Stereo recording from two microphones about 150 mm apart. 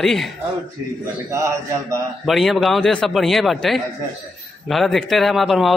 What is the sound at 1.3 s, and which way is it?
Speech, 20° right (ahead or behind).